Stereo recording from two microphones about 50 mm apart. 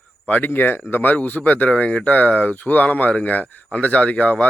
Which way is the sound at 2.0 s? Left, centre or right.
Left.